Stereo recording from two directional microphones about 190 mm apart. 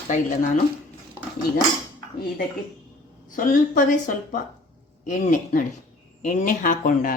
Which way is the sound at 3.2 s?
45° left (ahead or behind).